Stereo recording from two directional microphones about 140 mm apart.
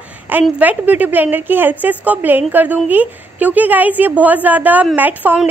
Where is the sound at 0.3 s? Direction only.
10° right (ahead or behind).